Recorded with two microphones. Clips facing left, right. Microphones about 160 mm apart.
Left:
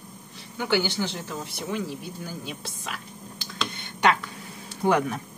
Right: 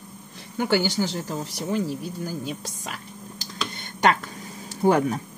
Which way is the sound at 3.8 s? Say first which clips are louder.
Right 2 dB; 40° right (ahead or behind).